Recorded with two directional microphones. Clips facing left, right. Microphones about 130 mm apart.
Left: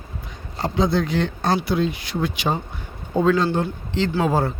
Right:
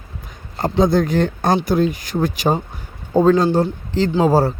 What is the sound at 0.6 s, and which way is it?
A man's voice, 45° right (ahead or behind).